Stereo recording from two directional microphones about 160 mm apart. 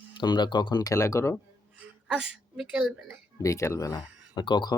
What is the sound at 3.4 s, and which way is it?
Speech, 20° left (ahead or behind).